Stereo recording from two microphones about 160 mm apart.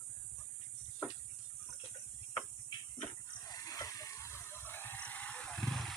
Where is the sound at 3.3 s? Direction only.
25° left (ahead or behind).